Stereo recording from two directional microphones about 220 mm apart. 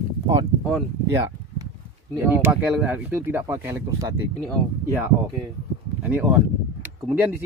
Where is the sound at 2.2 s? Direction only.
10° right (ahead or behind).